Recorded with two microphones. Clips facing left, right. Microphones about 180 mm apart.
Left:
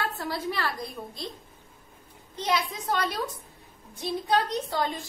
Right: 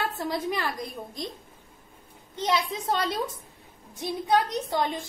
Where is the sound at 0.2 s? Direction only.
20° right (ahead or behind).